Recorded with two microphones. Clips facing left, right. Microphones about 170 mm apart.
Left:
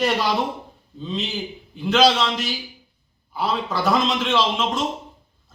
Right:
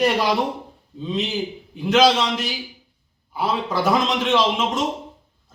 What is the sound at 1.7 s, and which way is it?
Speech, 15° right (ahead or behind).